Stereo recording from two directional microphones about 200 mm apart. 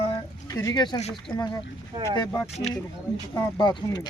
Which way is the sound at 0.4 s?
20° left (ahead or behind).